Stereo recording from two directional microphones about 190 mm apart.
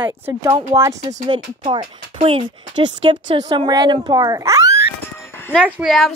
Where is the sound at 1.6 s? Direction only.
30° right (ahead or behind).